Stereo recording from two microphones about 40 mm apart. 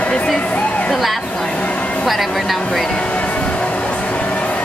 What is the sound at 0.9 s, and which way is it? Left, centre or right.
Speech, centre.